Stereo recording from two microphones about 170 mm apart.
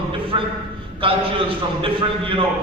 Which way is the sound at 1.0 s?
30° right (ahead or behind).